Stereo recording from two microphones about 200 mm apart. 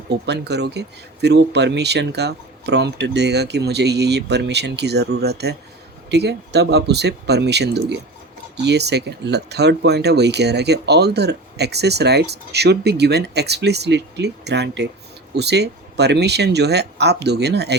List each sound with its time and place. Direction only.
0.1 s speech: 55° right (ahead or behind)